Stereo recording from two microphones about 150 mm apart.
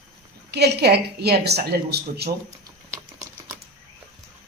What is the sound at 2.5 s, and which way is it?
Typing, 55° right (ahead or behind).